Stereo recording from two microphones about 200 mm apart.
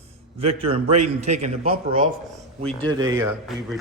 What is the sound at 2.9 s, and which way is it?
Speech, 20° right (ahead or behind).